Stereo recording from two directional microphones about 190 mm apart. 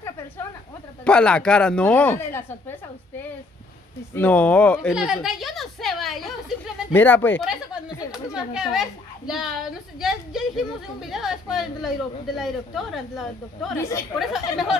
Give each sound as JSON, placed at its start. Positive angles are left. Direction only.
{"t": 1.0, "sound": "a woman's voice", "side_deg": 5}
{"t": 4.1, "sound": "speech", "side_deg": 10}
{"t": 4.8, "sound": "a sound", "side_deg": 0}
{"t": 6.9, "sound": "speech", "side_deg": 10}
{"t": 8.3, "sound": "a woman's voice", "side_deg": -5}
{"t": 13.7, "sound": "speech", "side_deg": 15}
{"t": 14.1, "sound": "a woman's voice", "side_deg": 0}